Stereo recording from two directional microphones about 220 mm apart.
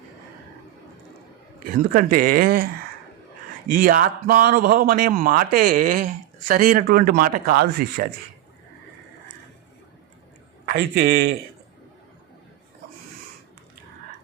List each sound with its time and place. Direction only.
1.6 s speech: 40° right (ahead or behind)
3.7 s speech: 40° right (ahead or behind)
10.7 s a man's voice: 45° right (ahead or behind)